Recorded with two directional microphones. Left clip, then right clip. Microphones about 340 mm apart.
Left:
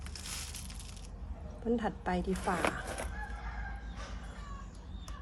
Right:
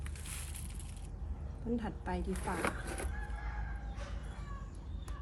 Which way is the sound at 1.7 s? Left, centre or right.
Left.